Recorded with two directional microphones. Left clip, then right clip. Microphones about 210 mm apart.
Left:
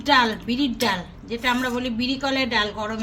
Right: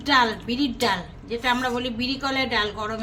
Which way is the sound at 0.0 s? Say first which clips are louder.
Left 1 dB; 10° left (ahead or behind).